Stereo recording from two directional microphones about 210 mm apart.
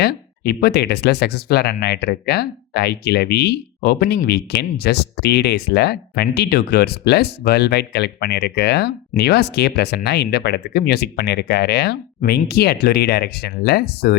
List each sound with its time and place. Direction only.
0.0 s speech: 50° left (ahead or behind)